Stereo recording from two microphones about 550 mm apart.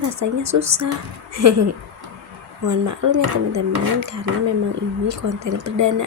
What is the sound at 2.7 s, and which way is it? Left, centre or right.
A woman's voice, right.